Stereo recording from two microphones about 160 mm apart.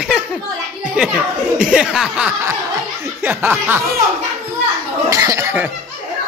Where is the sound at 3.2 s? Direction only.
10° right (ahead or behind).